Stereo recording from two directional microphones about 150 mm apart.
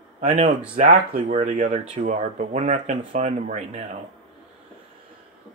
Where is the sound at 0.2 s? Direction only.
60° right (ahead or behind).